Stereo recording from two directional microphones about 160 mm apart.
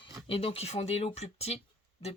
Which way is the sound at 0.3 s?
40° left (ahead or behind).